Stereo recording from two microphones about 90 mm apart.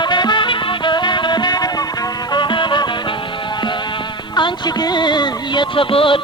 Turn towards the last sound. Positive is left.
turn(degrees=80)